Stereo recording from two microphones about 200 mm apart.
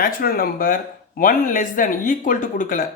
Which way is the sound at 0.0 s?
45° left (ahead or behind).